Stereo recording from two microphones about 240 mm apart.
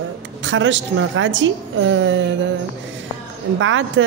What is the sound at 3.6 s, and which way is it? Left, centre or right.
Speech, right.